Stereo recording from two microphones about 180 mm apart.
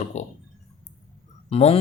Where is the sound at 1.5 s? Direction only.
35° left (ahead or behind).